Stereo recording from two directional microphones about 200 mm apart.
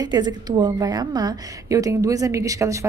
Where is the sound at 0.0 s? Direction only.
20° right (ahead or behind).